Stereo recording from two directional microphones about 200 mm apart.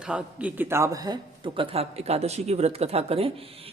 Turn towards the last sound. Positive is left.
turn(degrees=-30)  # may be behind; listen again after turning